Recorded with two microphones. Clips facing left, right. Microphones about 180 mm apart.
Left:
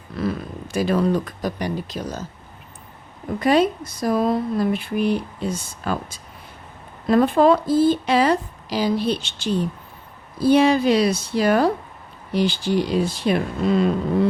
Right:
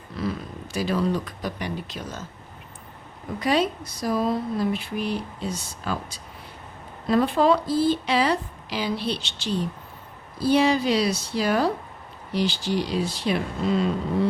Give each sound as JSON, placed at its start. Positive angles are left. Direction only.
{"t": 0.2, "sound": "speech", "side_deg": 55}
{"t": 3.4, "sound": "speech", "side_deg": 50}